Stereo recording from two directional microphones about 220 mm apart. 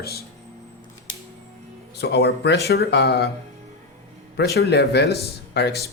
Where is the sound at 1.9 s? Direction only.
50° left (ahead or behind).